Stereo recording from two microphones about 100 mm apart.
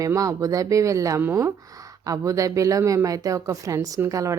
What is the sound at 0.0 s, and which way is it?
A woman's voice, 35° right (ahead or behind).